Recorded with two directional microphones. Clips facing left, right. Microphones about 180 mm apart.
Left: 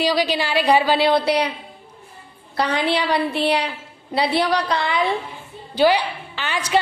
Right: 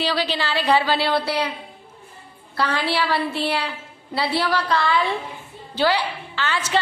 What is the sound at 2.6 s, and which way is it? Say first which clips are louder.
A woman's voice: left 2 dB; 15° left (ahead or behind).